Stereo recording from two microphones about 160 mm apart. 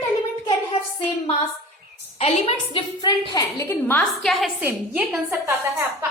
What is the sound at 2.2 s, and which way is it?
A woman's voice, 40° left (ahead or behind).